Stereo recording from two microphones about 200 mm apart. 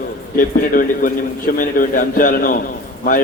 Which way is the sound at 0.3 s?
45° left (ahead or behind).